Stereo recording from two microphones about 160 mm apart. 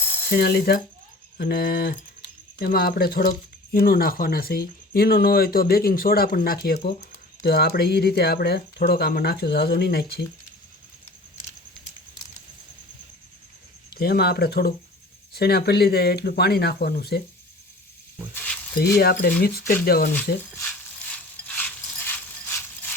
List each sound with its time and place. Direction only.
0.3 s speech: 75° left (ahead or behind)
13.9 s speech: 75° left (ahead or behind)
18.3 s a sound: 10° left (ahead or behind)
18.9 s speech: 75° left (ahead or behind)
21.1 s ratchet: 5° left (ahead or behind)